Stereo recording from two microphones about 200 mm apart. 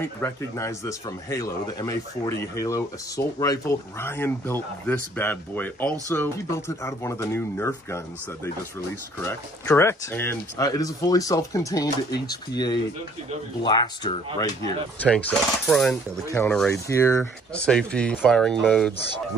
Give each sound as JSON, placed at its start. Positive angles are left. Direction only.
{"t": 0.0, "sound": "speech", "side_deg": 15}
{"t": 9.2, "sound": "speech", "side_deg": 10}
{"t": 15.0, "sound": "speech", "side_deg": 5}
{"t": 16.3, "sound": "speech", "side_deg": 15}